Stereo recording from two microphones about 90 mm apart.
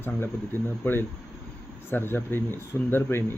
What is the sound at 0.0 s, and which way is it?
Speech, 25° left (ahead or behind).